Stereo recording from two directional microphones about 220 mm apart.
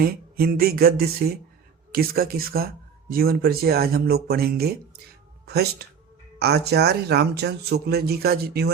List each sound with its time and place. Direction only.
0.0 s speech: 45° right (ahead or behind)